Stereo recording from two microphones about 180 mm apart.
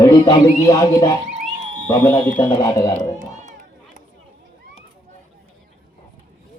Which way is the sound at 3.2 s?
45° right (ahead or behind).